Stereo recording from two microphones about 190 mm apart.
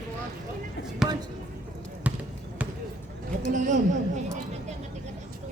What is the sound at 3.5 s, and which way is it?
Speech, 40° right (ahead or behind).